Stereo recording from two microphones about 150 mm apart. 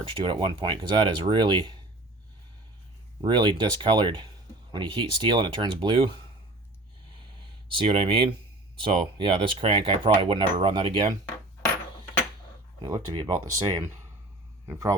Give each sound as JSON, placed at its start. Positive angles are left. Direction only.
{"t": 0.0, "sound": "speech", "side_deg": -35}
{"t": 3.2, "sound": "speech", "side_deg": -30}
{"t": 7.8, "sound": "speech", "side_deg": -35}
{"t": 12.8, "sound": "speech", "side_deg": -30}